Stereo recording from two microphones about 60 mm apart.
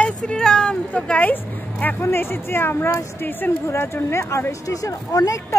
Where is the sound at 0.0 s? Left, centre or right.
Centre.